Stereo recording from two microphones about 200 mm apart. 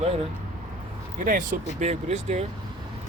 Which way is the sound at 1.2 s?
40° right (ahead or behind).